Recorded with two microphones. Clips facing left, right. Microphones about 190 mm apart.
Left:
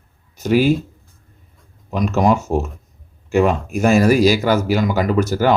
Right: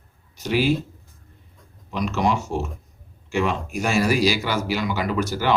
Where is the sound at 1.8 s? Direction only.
45° left (ahead or behind).